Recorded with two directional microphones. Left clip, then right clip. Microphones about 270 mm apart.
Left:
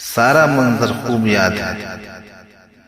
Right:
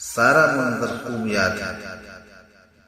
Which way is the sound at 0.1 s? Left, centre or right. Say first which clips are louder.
Left 4 dB; left.